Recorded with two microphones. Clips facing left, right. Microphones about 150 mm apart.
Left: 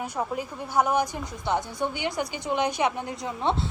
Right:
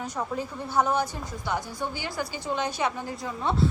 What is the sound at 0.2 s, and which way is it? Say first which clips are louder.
A woman's voice: left 1 dB; 15° left (ahead or behind).